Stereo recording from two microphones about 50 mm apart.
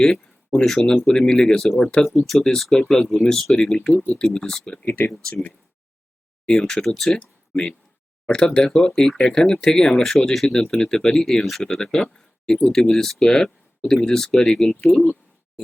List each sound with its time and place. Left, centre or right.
1.0 s speech: centre
6.6 s speech: centre
7.2 s a sound: centre
8.3 s speech: centre